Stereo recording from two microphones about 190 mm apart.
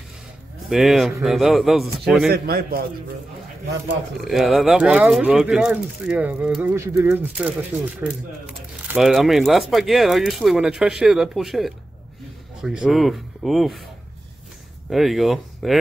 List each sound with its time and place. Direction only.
0.7 s speech: centre (ahead or behind)
2.3 s a man's voice: 55° right (ahead or behind)
4.2 s speech: centre (ahead or behind)
14.9 s speech: centre (ahead or behind)